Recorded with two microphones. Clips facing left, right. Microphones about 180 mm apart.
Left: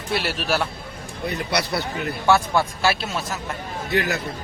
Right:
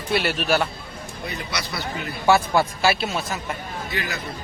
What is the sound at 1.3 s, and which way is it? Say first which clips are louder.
Speech: left 7 dB; 60° left (ahead or behind).